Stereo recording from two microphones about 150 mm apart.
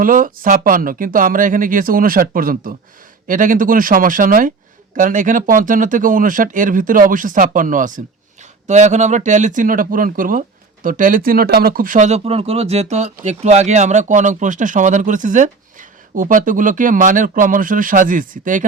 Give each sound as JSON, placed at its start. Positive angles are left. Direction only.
{"t": 0.0, "sound": "speech", "side_deg": -65}